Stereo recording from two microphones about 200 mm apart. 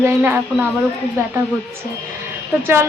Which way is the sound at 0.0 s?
15° right (ahead or behind).